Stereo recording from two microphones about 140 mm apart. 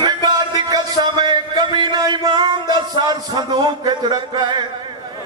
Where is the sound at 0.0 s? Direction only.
30° right (ahead or behind).